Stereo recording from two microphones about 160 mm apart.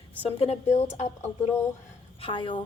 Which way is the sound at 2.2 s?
30° left (ahead or behind).